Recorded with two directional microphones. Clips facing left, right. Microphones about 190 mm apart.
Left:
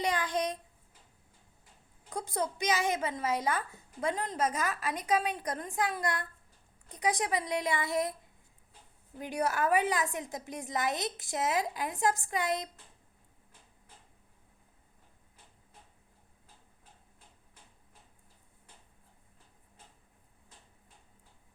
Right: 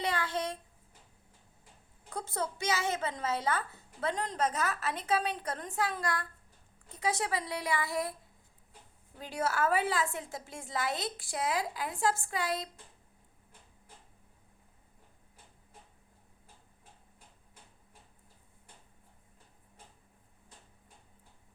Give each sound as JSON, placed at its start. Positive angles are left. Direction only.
{"t": 0.0, "sound": "child singing", "side_deg": 15}
{"t": 2.0, "sound": "a woman's voice", "side_deg": 15}
{"t": 9.2, "sound": "a woman's voice", "side_deg": 15}